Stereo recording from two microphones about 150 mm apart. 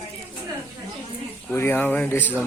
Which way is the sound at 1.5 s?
15° left (ahead or behind).